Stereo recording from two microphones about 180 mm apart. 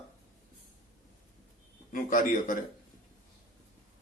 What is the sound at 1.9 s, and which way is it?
Speech, 45° left (ahead or behind).